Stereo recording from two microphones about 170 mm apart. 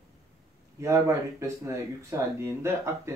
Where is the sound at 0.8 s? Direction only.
15° right (ahead or behind).